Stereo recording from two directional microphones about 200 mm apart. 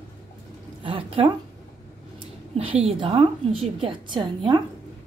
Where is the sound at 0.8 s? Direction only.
25° right (ahead or behind).